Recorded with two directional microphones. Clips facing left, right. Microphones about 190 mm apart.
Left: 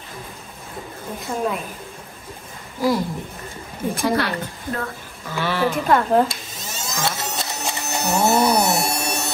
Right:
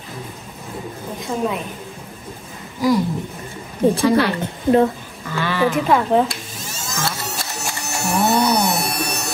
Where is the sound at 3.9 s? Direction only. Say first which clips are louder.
Right 5 dB; 25° right (ahead or behind).